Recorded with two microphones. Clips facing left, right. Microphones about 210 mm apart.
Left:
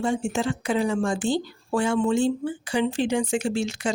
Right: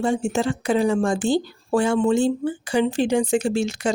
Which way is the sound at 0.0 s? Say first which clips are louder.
Right 3 dB; 35° right (ahead or behind).